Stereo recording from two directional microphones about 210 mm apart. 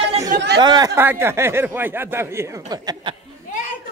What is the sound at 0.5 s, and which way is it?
Speech, 20° right (ahead or behind).